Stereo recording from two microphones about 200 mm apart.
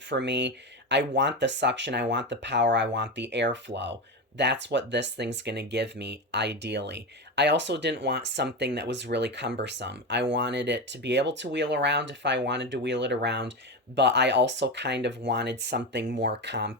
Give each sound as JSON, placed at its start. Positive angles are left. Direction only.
{"t": 0.1, "sound": "speech", "side_deg": -60}